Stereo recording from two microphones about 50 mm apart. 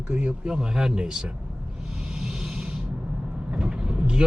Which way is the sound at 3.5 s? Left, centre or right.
Centre.